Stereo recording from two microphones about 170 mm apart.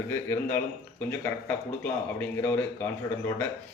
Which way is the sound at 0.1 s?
10° left (ahead or behind).